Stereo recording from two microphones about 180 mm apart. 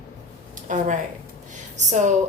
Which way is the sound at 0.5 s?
45° right (ahead or behind).